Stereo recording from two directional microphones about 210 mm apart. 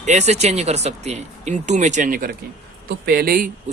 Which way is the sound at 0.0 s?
35° right (ahead or behind).